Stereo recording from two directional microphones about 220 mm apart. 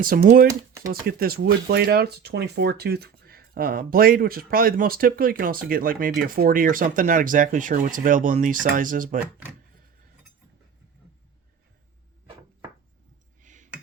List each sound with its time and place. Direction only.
0.2 s speech: 35° right (ahead or behind)
13.4 s clicking: 35° right (ahead or behind)